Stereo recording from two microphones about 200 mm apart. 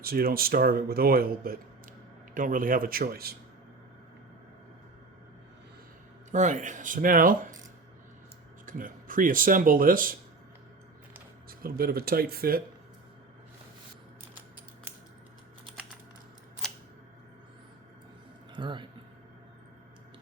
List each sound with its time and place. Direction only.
0.0 s speech: 50° right (ahead or behind)
6.3 s speech: 40° right (ahead or behind)
8.6 s speech: 45° right (ahead or behind)
11.4 s speech: 45° right (ahead or behind)
16.6 s scissors: centre (ahead or behind)
18.5 s speech: 25° right (ahead or behind)